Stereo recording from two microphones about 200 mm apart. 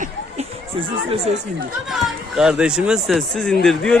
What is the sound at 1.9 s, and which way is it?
Speech, centre (ahead or behind).